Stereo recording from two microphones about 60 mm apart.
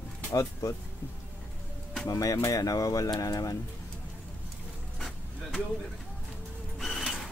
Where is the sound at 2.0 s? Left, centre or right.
Left.